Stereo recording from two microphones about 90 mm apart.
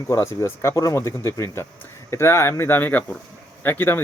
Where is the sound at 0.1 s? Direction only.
30° left (ahead or behind).